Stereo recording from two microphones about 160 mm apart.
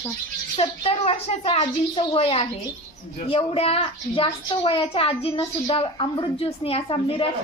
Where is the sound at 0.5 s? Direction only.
40° left (ahead or behind).